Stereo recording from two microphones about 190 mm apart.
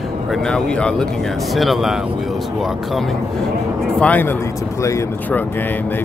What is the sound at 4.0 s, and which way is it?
Speech, 10° left (ahead or behind).